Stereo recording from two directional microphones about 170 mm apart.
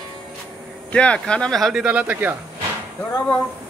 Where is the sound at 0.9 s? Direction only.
5° left (ahead or behind); by 2.3 s 10° right (ahead or behind).